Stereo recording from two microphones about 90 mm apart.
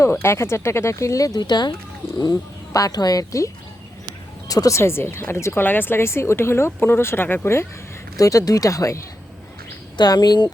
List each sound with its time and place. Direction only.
0.0 s speech: 30° left (ahead or behind); by 1.7 s 55° left (ahead or behind)
2.3 s speech: 40° left (ahead or behind)
4.8 s speech: 30° left (ahead or behind)
8.1 s speech: 40° left (ahead or behind)
10.0 s speech: 50° left (ahead or behind)